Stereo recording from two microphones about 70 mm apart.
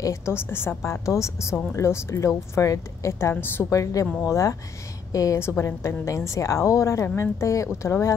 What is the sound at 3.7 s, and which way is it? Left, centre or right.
A woman's voice, left.